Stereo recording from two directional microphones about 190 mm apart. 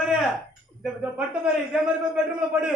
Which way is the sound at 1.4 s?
5° right (ahead or behind).